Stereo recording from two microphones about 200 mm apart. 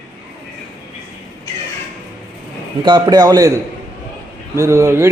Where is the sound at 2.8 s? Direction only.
20° right (ahead or behind).